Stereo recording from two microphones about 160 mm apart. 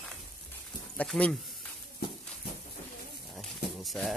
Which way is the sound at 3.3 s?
Centre (ahead or behind).